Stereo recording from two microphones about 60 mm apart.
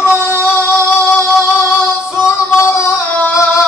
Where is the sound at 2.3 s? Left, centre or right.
Left.